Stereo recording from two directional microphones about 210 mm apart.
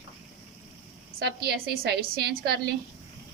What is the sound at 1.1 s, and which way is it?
A woman's voice, 50° right (ahead or behind).